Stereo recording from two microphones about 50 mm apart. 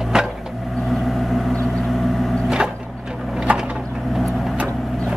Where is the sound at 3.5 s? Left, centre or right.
Right.